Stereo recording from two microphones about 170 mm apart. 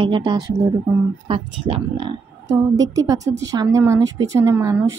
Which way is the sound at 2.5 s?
20° right (ahead or behind).